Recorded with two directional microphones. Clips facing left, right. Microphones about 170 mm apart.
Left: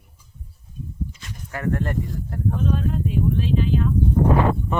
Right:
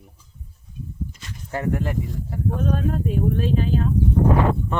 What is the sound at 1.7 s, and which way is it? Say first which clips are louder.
Speech: left 2 dB; 5° right (ahead or behind).